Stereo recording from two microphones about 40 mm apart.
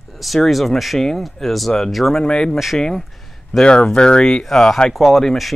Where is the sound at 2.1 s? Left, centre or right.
Centre.